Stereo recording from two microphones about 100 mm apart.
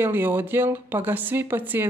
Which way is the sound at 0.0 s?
20° right (ahead or behind).